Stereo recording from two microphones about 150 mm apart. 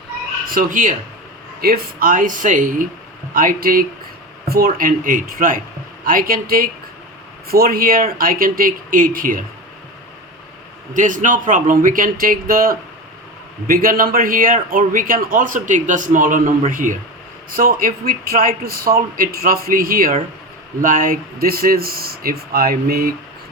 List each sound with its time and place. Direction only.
0.4 s speech: 70° right (ahead or behind)
1.6 s a man's voice: 75° right (ahead or behind)
4.4 s a man's voice: 90° right
7.4 s a man's voice: 90° right; by 9.4 s 65° right (ahead or behind)
10.9 s a man's voice: 60° right (ahead or behind); by 23.1 s 80° right